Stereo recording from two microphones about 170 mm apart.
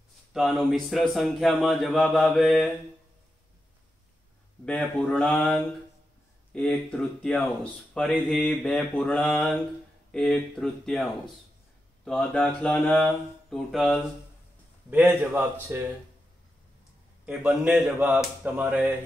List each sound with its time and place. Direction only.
0.3 s speech: centre (ahead or behind)
4.6 s speech: 5° left (ahead or behind)
14.9 s a man's voice: 10° right (ahead or behind)
17.3 s a man's voice: 5° right (ahead or behind)